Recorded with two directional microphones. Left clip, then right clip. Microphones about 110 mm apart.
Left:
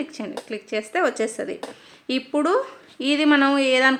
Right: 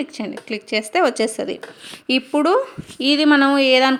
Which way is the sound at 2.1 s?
40° right (ahead or behind).